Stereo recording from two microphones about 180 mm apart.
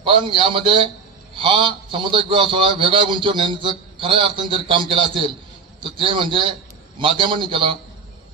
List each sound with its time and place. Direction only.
0.0 s a man's voice: 30° right (ahead or behind)